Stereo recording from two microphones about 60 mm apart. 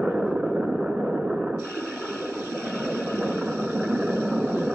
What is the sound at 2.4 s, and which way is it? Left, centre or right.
Vehicle, right.